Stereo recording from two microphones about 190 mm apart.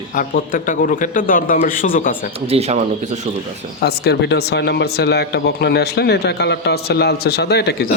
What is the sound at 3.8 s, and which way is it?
Speech, 60° left (ahead or behind).